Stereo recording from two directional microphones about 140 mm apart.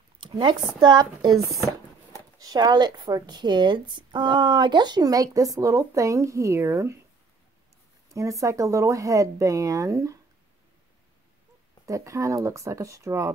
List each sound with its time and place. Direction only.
0.2 s speech: 35° right (ahead or behind)
2.3 s a woman's voice: 25° right (ahead or behind)
8.1 s a woman's voice: 25° right (ahead or behind)
11.8 s a woman's voice: 20° right (ahead or behind)